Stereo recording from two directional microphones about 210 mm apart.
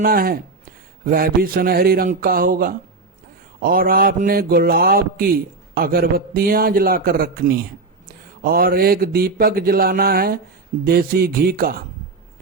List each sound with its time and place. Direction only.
0.0 s mantra: 45° right (ahead or behind)